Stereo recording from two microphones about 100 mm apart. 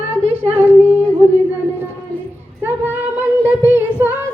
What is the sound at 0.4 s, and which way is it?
Humming, 20° right (ahead or behind).